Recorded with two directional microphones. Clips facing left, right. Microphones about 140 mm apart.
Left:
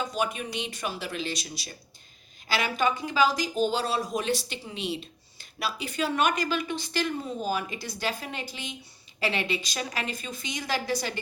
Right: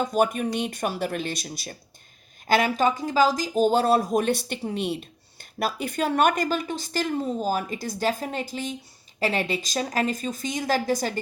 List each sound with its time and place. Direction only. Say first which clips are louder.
0.0 s speech: right 7 dB; 50° right (ahead or behind)